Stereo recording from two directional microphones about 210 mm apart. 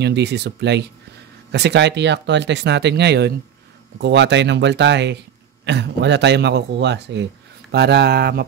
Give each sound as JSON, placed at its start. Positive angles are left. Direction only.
{"t": 0.0, "sound": "speech", "side_deg": -55}